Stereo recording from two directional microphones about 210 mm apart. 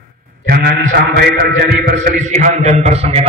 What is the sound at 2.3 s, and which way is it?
Speech, 35° right (ahead or behind).